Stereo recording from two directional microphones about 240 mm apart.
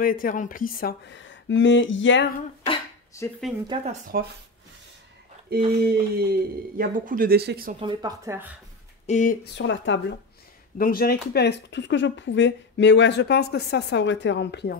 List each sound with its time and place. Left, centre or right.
0.0 s speech: left
2.6 s a sound: left
3.6 s speech: centre
4.1 s speech: right
5.8 s speech: right
7.8 s speech: centre
9.0 s speech: left
9.6 s speech: left
10.8 s speech: left